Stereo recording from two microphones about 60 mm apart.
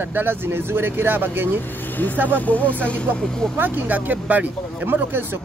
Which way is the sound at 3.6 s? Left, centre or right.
Right.